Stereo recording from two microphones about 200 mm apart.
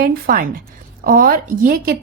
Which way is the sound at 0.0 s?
45° right (ahead or behind).